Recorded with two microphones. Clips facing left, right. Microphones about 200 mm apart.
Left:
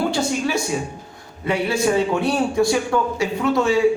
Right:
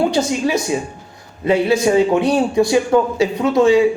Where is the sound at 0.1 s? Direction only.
20° right (ahead or behind).